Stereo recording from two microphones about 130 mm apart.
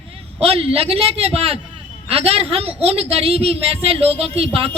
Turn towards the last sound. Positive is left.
turn(degrees=-45)  # may be behind; listen again after turning